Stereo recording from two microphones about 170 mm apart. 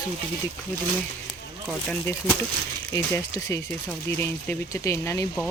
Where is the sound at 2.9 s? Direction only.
20° left (ahead or behind).